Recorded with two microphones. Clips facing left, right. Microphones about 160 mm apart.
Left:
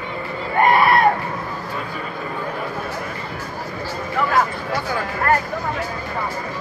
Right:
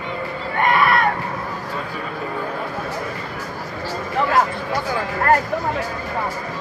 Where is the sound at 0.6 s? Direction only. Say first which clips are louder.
Left 3 dB; 40° left (ahead or behind).